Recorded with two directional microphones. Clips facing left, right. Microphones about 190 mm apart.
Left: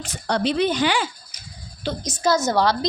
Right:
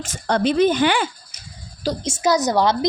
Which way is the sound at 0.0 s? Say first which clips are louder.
Right 3 dB; 50° right (ahead or behind).